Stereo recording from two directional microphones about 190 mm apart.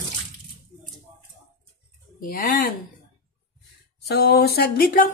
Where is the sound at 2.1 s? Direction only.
50° left (ahead or behind).